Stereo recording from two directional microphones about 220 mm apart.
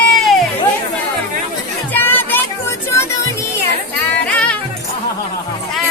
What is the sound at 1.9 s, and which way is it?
Music, 10° left (ahead or behind).